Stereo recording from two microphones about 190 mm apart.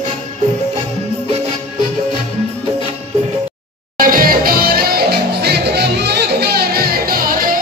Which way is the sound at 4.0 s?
50° right (ahead or behind).